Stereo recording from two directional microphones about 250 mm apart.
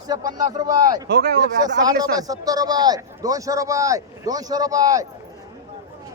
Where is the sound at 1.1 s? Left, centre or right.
Right.